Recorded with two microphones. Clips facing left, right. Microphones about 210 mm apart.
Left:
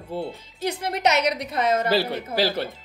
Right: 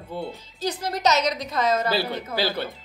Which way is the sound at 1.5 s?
35° left (ahead or behind).